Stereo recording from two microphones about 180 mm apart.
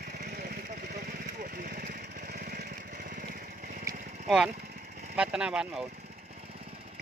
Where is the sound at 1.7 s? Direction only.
60° right (ahead or behind).